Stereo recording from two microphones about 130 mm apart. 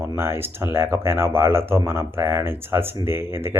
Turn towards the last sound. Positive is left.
turn(degrees=-20)  # may be behind; listen again after turning